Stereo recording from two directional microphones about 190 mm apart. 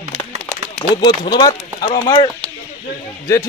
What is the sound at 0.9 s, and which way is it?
A man's voice, 20° left (ahead or behind).